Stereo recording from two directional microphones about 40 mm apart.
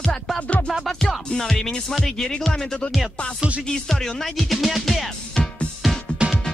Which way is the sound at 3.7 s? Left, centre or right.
Centre.